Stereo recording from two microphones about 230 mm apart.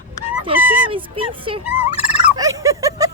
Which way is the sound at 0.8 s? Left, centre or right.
Right.